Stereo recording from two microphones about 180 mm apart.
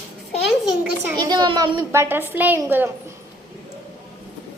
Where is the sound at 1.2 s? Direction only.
25° right (ahead or behind).